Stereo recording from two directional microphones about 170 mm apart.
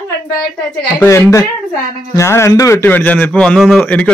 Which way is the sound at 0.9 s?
15° left (ahead or behind).